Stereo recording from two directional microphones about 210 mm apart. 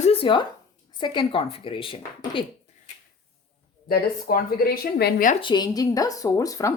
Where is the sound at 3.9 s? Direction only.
45° left (ahead or behind).